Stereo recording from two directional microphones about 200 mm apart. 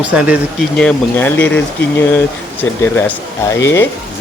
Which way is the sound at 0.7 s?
5° left (ahead or behind).